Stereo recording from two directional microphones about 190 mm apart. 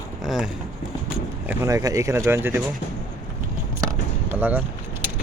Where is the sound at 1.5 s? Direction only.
15° right (ahead or behind).